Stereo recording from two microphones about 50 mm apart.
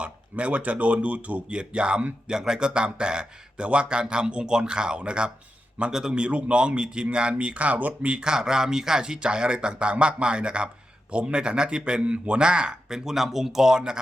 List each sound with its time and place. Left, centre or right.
0.0 s speech: right
2.3 s speech: centre; by 8.1 s right
8.1 s speech: centre